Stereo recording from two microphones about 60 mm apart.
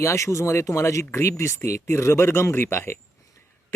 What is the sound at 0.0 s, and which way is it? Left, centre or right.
Speech, left.